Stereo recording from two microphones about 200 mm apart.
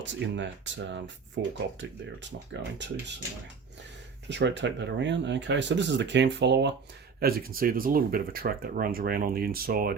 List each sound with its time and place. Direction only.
0.0 s speech: 65° right (ahead or behind)
4.3 s speech: 60° right (ahead or behind)